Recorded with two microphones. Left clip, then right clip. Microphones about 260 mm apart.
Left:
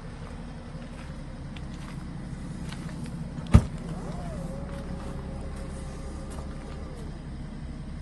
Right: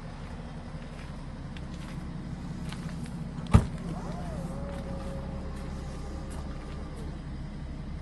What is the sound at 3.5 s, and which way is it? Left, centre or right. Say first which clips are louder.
Vehicle: left 2 dB; right.